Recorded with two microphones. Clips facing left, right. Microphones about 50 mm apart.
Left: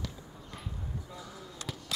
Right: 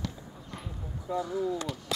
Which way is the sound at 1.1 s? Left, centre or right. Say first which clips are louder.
Right 16 dB; centre.